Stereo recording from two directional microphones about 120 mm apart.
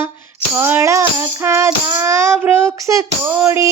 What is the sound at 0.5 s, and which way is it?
Music, 20° right (ahead or behind).